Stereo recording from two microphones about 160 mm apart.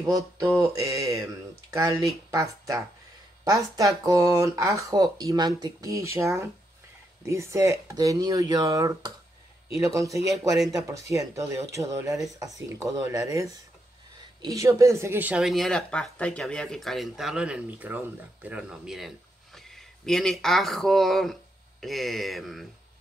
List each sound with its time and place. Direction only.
0.0 s speech: 20° right (ahead or behind); by 22.7 s centre (ahead or behind)